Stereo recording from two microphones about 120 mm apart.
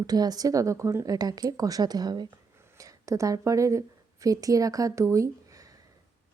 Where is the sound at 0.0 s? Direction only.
35° right (ahead or behind).